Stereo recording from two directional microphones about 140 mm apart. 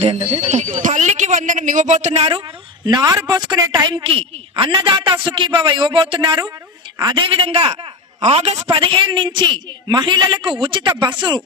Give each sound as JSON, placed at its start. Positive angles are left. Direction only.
{"t": 0.0, "sound": "speech", "side_deg": -45}
{"t": 2.8, "sound": "a man's voice", "side_deg": -30}